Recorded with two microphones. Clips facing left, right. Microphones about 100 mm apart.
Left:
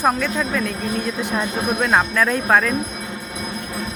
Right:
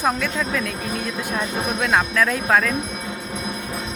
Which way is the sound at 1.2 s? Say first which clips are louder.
Left 1 dB; 20° left (ahead or behind).